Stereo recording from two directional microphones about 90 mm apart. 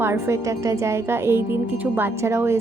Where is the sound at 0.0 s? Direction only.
30° right (ahead or behind).